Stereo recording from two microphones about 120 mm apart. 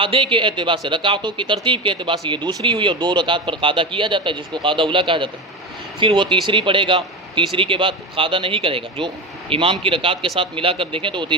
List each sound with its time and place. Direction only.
0.0 s speech: 45° right (ahead or behind)